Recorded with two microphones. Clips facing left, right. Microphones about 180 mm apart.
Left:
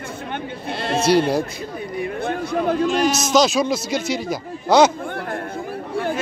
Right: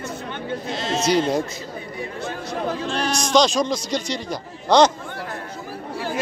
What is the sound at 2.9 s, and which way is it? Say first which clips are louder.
A man's voice: right 1 dB; 5° left (ahead or behind).